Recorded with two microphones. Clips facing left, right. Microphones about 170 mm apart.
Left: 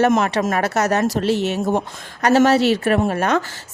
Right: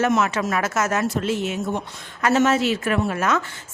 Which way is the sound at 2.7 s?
35° left (ahead or behind).